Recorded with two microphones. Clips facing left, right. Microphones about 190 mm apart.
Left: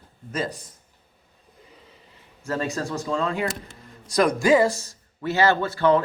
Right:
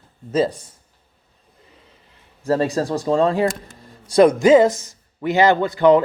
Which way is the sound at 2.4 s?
35° right (ahead or behind).